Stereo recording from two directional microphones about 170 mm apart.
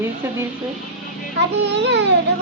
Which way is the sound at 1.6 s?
90° right.